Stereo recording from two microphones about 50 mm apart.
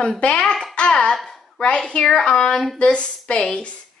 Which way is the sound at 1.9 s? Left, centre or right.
Centre.